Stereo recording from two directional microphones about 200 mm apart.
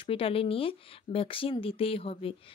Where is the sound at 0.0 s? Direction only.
25° left (ahead or behind).